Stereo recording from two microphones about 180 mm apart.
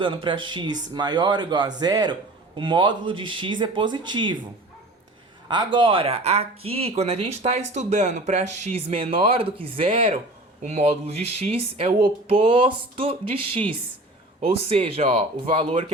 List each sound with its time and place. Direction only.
0.0 s speech: 30° right (ahead or behind)
5.5 s speech: 25° right (ahead or behind)